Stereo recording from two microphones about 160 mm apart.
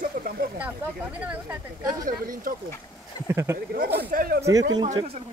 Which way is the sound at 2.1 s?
60° right (ahead or behind).